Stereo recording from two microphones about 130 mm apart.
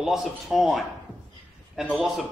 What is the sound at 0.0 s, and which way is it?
A man's voice, centre (ahead or behind).